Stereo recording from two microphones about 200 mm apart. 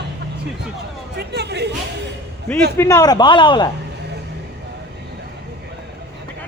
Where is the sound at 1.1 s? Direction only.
55° right (ahead or behind).